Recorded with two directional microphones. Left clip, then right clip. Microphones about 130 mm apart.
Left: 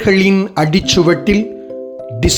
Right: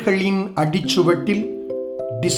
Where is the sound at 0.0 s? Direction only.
30° left (ahead or behind).